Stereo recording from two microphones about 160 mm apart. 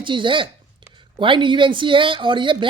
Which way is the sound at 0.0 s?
30° right (ahead or behind).